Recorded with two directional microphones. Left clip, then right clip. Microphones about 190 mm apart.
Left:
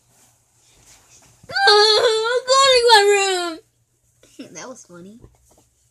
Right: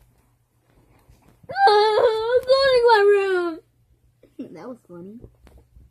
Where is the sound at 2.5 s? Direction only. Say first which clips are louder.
Left 4 dB; 25° right (ahead or behind).